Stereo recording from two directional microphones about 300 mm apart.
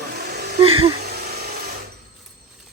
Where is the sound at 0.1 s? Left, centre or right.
Right.